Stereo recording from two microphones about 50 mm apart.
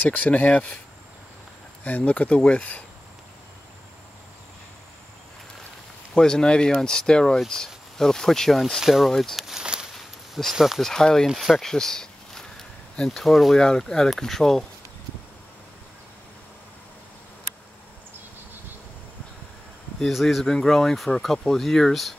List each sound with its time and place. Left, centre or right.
0.0 s speech: left
1.9 s speech: left
6.1 s speech: centre
9.4 s speech: centre
9.9 s a sound: centre
10.5 s speech: centre
10.8 s speech: centre
11.2 s speech: centre
11.6 s a sound: centre
12.9 s speech: centre
13.2 s speech: centre
20.1 s speech: centre